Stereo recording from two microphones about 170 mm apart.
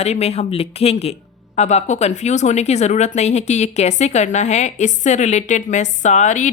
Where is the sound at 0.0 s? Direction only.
40° left (ahead or behind).